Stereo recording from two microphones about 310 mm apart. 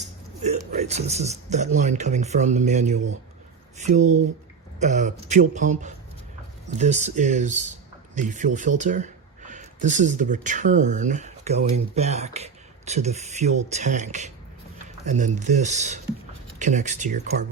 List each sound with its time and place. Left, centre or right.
0.7 s speech: right